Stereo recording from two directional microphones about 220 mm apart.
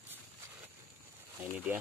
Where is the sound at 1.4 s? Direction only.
10° right (ahead or behind).